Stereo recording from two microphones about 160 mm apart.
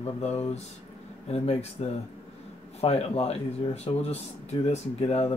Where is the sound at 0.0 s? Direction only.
40° left (ahead or behind).